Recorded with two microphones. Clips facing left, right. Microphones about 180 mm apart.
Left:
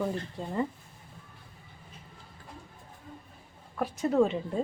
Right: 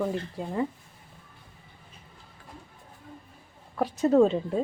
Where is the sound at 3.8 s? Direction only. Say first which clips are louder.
Right 5 dB; 35° right (ahead or behind).